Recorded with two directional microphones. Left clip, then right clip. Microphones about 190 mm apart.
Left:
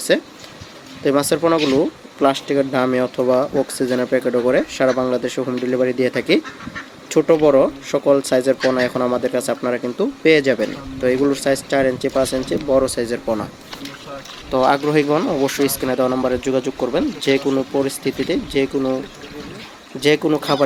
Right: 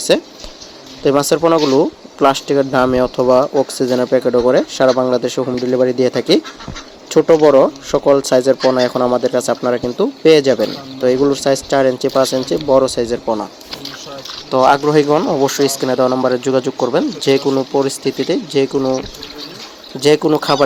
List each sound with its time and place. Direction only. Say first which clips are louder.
0.1 s speech: right 3 dB; 20° right (ahead or behind)
14.5 s speech: right 5 dB; 15° right (ahead or behind)
20.0 s speech: right 4 dB; 15° right (ahead or behind)